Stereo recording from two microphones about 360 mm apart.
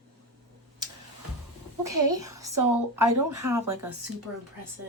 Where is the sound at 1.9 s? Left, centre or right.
Right.